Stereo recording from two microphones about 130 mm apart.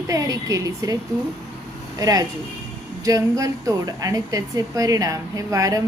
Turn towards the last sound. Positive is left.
turn(degrees=-25)  # may be behind; listen again after turning